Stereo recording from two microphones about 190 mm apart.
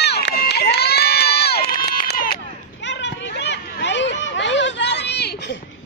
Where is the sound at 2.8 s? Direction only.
70° left (ahead or behind).